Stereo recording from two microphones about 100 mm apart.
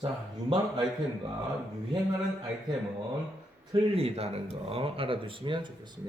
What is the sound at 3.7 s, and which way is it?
Speech, 75° right (ahead or behind).